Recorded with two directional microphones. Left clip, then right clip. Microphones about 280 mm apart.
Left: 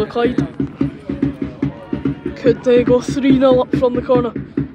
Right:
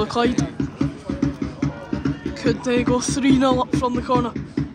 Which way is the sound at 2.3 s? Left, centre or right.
Centre.